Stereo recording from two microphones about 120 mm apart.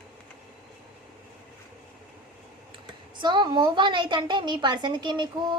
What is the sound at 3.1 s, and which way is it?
A woman's voice, 40° right (ahead or behind).